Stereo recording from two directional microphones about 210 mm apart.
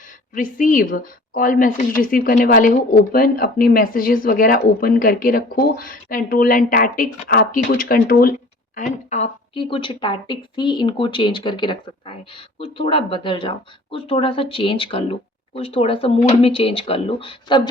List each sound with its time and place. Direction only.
0.3 s a woman's voice: 40° left (ahead or behind)